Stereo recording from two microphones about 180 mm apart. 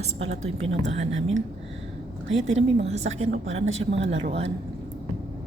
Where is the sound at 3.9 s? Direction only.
85° right.